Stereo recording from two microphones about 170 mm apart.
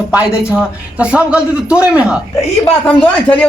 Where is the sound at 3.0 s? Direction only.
5° left (ahead or behind).